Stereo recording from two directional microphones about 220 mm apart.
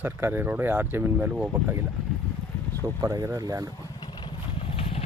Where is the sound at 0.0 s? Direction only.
10° right (ahead or behind).